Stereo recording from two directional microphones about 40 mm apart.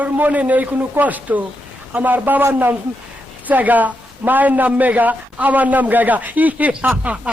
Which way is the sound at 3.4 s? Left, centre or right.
Right.